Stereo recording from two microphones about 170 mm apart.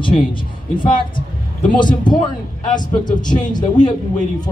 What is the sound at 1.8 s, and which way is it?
Speech, 25° left (ahead or behind).